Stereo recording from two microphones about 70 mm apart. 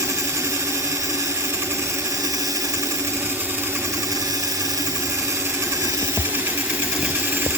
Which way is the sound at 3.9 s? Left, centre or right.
Right.